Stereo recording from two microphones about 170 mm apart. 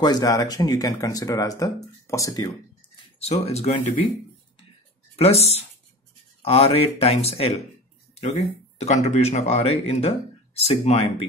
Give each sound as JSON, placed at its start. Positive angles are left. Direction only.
{"t": 0.0, "sound": "speech", "side_deg": 25}
{"t": 3.2, "sound": "speech", "side_deg": 40}
{"t": 5.1, "sound": "speech", "side_deg": 35}